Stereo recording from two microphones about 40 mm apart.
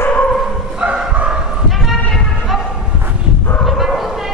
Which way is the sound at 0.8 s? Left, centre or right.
Right.